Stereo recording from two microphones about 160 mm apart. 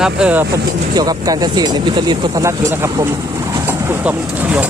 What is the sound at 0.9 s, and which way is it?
Speech, 25° right (ahead or behind).